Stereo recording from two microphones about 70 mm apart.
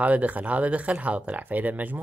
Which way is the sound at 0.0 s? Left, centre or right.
Right.